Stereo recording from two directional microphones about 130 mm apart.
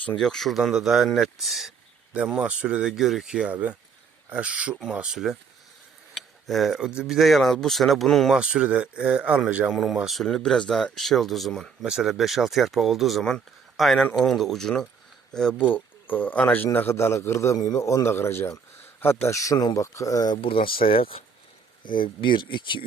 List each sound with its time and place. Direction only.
0.0 s a man's voice: 5° left (ahead or behind); by 20.4 s 30° left (ahead or behind)
20.4 s speech: 45° left (ahead or behind)